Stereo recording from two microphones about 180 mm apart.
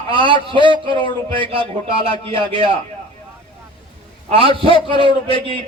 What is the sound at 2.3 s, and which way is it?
Speech, 25° right (ahead or behind).